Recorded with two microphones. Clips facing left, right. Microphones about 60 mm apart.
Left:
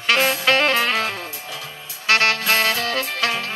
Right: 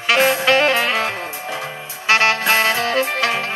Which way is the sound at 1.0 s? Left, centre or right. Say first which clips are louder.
Right 3 dB; right.